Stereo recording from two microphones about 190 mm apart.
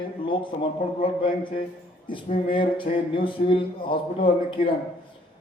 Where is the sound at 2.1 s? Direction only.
25° left (ahead or behind).